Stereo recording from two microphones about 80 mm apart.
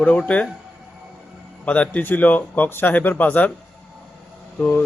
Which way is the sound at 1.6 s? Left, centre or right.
Centre.